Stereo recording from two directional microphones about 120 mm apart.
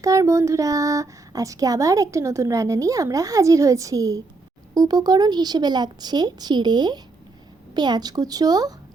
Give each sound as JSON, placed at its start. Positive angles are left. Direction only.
{"t": 0.0, "sound": "a woman's voice", "side_deg": -25}